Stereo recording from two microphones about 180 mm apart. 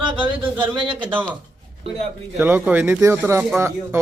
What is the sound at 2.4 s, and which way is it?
A man's voice, 10° right (ahead or behind).